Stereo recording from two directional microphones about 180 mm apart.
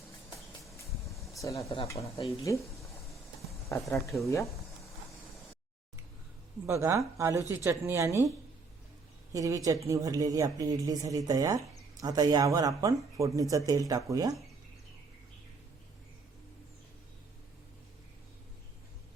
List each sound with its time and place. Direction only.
1.4 s speech: 15° left (ahead or behind)
2.0 s speech: 30° left (ahead or behind)
2.4 s speech: 15° left (ahead or behind)
4.0 s speech: centre (ahead or behind)
6.7 s a woman's voice: 15° right (ahead or behind)
9.3 s speech: 20° right (ahead or behind)